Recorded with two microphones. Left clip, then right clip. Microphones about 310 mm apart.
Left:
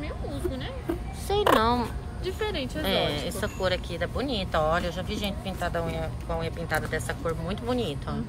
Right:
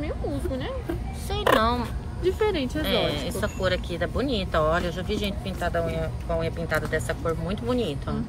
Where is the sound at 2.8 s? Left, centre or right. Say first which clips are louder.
Even; centre.